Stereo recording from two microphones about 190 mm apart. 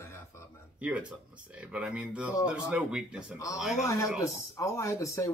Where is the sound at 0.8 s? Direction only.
5° right (ahead or behind).